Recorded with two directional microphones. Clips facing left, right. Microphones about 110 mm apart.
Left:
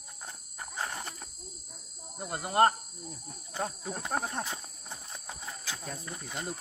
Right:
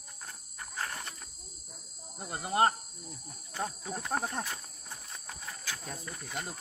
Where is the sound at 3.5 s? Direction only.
20° left (ahead or behind).